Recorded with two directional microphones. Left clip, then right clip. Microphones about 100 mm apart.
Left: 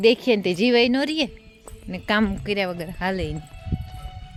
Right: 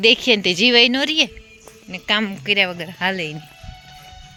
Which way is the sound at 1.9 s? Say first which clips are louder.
Right 3 dB; 90° left.